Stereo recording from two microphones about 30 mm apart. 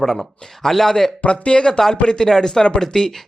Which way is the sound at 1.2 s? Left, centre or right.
Left.